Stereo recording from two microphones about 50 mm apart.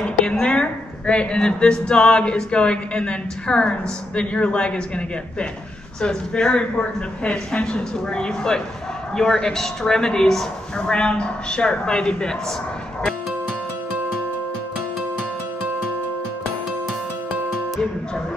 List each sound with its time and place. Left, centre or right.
0.0 s a woman's voice: left